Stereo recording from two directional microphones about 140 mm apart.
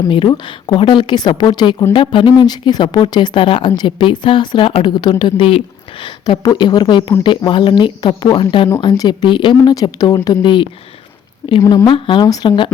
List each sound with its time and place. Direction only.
0.1 s a woman's voice: 35° left (ahead or behind)
11.6 s a woman's voice: 20° left (ahead or behind)
11.9 s a woman's voice: 35° left (ahead or behind)